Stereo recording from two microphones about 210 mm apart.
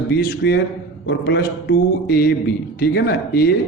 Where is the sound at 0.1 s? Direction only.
45° left (ahead or behind).